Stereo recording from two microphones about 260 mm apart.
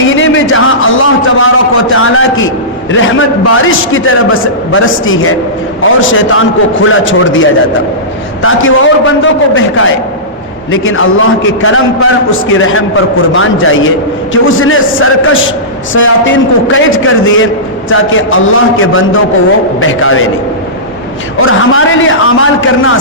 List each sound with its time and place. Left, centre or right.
0.0 s a sound: left
2.9 s a man's voice: left
21.4 s a man's voice: left